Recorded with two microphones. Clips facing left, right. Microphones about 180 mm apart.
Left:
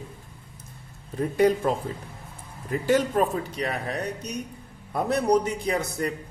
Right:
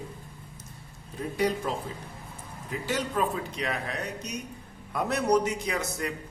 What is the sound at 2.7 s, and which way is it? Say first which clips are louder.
A man's voice: left 8 dB; 50° left (ahead or behind).